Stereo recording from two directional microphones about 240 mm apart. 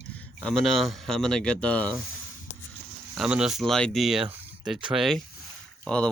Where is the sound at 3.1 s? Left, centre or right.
Centre.